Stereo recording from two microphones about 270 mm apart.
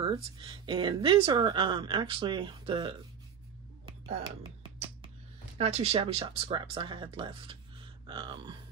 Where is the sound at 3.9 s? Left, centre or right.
Centre.